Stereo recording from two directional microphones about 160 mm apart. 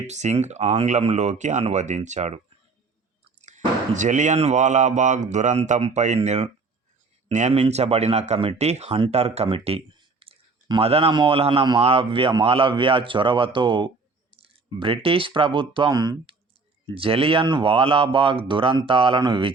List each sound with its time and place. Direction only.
0.1 s speech: 45° right (ahead or behind)
3.4 s speech: 50° right (ahead or behind); by 19.5 s 30° right (ahead or behind)